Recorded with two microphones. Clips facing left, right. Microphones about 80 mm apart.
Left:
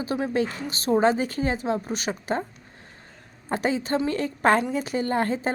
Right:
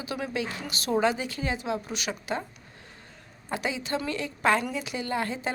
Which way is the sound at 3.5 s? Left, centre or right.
Left.